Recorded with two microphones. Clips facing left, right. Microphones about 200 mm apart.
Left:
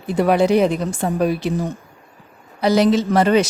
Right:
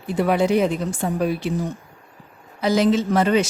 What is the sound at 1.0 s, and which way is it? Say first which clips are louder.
Speech: left 3 dB; 40° left (ahead or behind).